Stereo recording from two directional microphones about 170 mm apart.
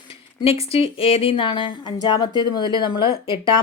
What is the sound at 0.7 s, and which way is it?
A woman's voice, 35° left (ahead or behind).